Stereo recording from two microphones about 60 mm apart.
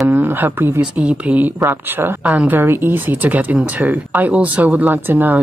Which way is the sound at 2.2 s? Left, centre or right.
Right.